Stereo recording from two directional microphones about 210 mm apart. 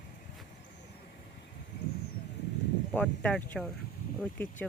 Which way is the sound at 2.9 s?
5° left (ahead or behind).